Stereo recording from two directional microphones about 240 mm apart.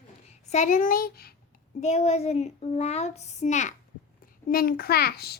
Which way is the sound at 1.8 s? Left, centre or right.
Left.